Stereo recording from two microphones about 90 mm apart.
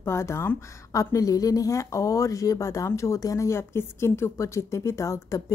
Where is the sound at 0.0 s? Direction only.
30° left (ahead or behind).